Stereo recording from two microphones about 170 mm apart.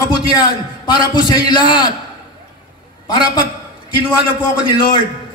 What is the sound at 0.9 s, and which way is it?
Speech, 25° left (ahead or behind).